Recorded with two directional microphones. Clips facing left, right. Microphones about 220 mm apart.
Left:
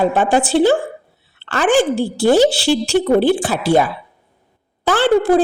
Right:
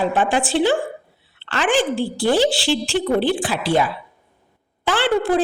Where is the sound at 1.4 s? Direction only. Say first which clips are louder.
Left 4 dB; 45° left (ahead or behind).